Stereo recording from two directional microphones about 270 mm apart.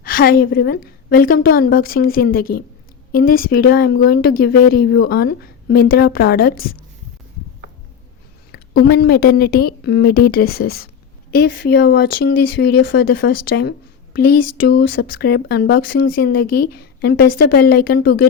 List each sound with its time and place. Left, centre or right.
0.0 s a sound: left
0.5 s a woman's voice: left
8.5 s a woman's voice: left